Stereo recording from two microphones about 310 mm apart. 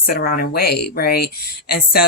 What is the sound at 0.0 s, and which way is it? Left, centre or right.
Speech, left.